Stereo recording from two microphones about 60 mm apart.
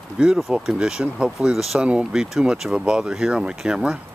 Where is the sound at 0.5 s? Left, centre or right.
Centre.